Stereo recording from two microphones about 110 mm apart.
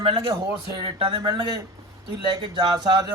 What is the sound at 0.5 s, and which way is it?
Speech, 45° right (ahead or behind).